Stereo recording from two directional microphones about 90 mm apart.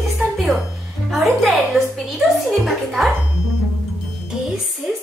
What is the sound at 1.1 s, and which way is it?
A woman's voice, centre (ahead or behind).